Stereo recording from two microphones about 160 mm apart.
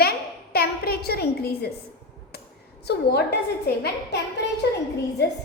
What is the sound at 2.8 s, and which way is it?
Speech, 90° left.